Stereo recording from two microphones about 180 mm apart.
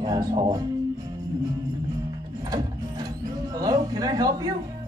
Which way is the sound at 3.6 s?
20° right (ahead or behind).